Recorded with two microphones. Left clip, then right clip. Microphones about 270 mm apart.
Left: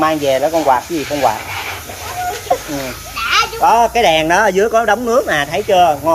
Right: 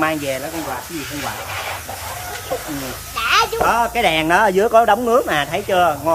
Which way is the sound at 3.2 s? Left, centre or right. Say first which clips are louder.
Left 1 dB; right.